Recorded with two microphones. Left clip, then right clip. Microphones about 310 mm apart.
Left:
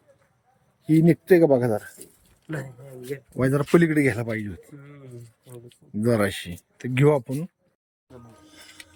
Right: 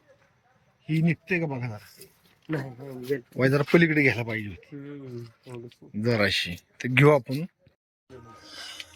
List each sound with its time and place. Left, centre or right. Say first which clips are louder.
0.9 s speech: left 10 dB; centre
3.3 s speech: left 1 dB; centre
6.1 s speech: even; centre
8.4 s music: right 8 dB; centre